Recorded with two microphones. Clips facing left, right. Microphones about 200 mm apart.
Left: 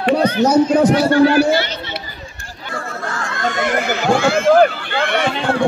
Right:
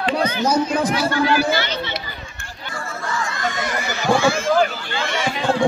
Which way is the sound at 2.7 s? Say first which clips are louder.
Left 2 dB; 60° left (ahead or behind).